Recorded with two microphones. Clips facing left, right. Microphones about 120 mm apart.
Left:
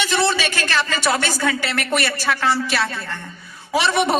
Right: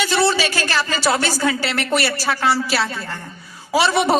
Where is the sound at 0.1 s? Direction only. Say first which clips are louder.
Right 2 dB; 30° right (ahead or behind).